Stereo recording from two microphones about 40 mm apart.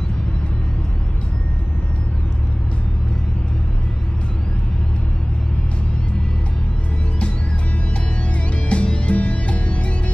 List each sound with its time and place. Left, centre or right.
8.6 s music: left